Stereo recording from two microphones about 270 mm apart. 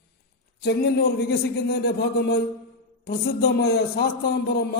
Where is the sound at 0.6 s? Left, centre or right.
Left.